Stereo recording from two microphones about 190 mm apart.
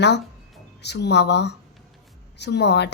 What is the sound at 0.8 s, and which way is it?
A woman's voice, 65° left (ahead or behind).